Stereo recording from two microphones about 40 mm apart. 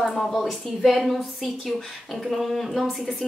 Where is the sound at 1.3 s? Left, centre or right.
Centre.